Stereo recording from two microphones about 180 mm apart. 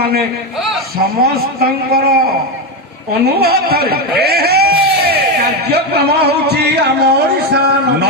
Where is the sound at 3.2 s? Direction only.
60° right (ahead or behind).